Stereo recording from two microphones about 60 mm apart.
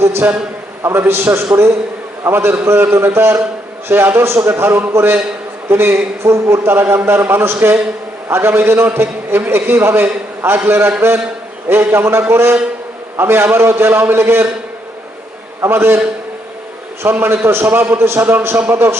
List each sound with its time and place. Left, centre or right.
0.0 s a man's voice: right
6.2 s a man's voice: right
15.7 s a man's voice: right
17.0 s a man's voice: right